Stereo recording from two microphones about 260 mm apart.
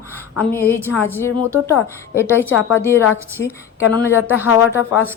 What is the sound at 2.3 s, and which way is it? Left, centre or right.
Speech, centre.